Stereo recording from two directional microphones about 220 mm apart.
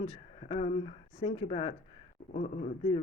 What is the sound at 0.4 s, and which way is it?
Speech, 30° left (ahead or behind).